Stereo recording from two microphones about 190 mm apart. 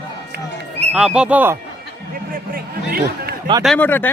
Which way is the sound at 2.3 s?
50° right (ahead or behind).